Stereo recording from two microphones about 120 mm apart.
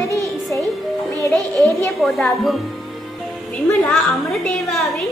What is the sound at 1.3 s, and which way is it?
Speech, 20° left (ahead or behind).